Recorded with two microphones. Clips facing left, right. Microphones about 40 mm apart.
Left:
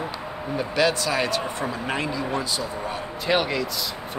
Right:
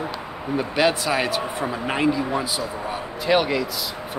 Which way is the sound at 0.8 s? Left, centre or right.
Centre.